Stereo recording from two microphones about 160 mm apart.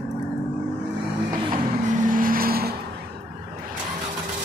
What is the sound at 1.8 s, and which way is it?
Music, 55° right (ahead or behind).